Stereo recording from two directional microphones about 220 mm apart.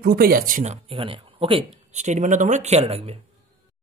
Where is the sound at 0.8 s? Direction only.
25° right (ahead or behind).